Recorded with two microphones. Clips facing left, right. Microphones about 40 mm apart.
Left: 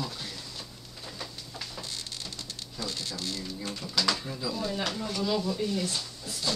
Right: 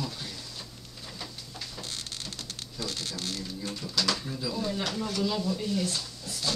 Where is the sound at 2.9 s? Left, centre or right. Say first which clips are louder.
Even; right.